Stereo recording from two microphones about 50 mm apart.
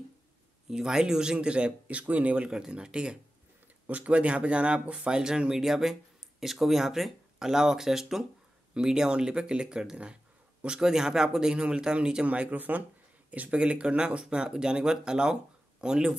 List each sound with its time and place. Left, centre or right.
0.7 s speech: centre
3.8 s speech: right
12.3 s speech: right